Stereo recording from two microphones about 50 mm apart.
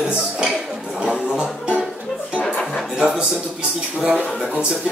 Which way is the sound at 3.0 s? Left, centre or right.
Centre.